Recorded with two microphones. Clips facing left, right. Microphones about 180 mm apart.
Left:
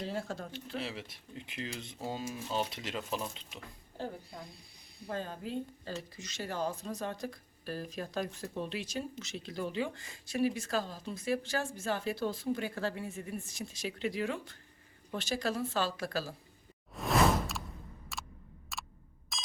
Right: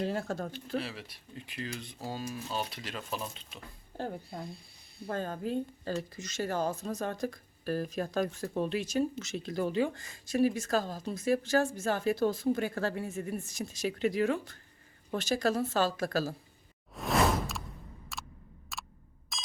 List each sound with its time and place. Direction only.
0.0 s speech: 50° right (ahead or behind)
0.8 s speech: 20° left (ahead or behind)
5.0 s a woman's voice: 50° right (ahead or behind)
16.9 s whoosh: centre (ahead or behind)
18.1 s a sound: centre (ahead or behind)
19.3 s music: centre (ahead or behind)